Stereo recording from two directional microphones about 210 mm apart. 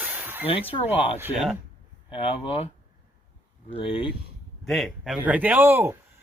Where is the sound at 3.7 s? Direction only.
25° left (ahead or behind).